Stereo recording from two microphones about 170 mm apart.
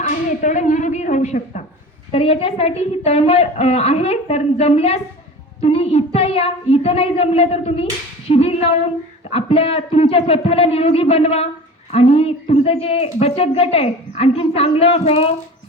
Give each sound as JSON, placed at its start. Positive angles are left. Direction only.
{"t": 0.0, "sound": "speech", "side_deg": 45}
{"t": 2.1, "sound": "speech", "side_deg": 35}
{"t": 8.3, "sound": "female singing", "side_deg": 35}
{"t": 9.3, "sound": "speech", "side_deg": 35}